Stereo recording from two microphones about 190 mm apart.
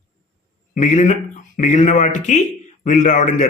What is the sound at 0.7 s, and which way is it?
Speech, 40° left (ahead or behind).